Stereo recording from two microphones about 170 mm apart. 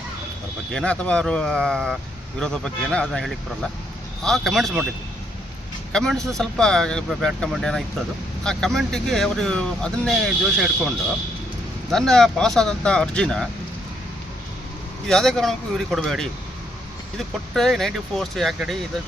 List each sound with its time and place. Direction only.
0.7 s speech: 5° left (ahead or behind)
5.9 s speech: 5° left (ahead or behind)
15.0 s speech: centre (ahead or behind)